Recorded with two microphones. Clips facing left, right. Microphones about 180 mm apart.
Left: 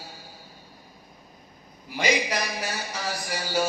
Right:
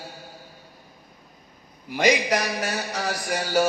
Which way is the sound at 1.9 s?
60° right (ahead or behind).